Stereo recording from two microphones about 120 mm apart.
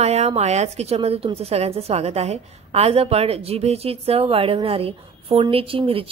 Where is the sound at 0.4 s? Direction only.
65° right (ahead or behind).